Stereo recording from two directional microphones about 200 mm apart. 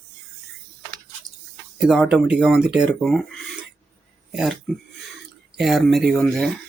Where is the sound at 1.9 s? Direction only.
Centre (ahead or behind).